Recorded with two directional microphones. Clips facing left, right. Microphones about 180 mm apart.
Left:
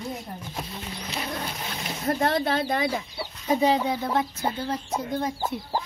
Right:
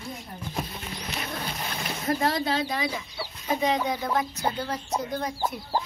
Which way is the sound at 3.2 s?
30° left (ahead or behind).